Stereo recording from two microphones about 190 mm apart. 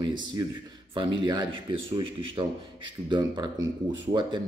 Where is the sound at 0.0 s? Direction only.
25° right (ahead or behind).